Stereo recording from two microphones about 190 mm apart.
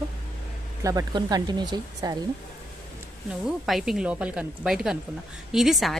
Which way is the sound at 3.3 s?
Centre (ahead or behind).